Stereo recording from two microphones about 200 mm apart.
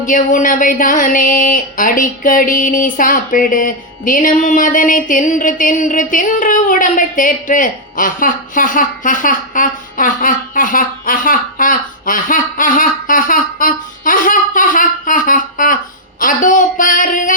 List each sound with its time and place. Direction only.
0.0 s speech: 40° left (ahead or behind)